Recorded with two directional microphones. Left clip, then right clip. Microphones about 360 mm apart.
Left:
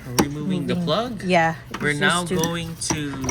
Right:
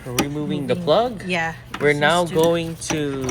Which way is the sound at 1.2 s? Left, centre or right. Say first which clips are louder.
Left 5 dB; left.